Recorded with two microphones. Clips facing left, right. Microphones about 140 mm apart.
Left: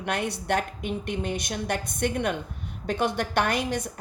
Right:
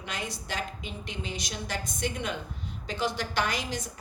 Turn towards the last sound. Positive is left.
turn(degrees=60)  # may be behind; listen again after turning